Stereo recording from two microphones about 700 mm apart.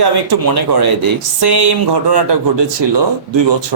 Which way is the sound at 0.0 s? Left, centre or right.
Right.